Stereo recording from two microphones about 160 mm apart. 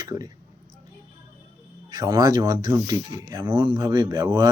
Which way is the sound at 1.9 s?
20° right (ahead or behind).